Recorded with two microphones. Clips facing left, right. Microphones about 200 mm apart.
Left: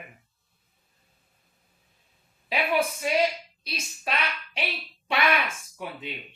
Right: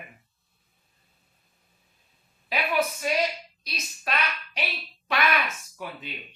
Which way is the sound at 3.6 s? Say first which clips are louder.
Left 1 dB; 30° left (ahead or behind).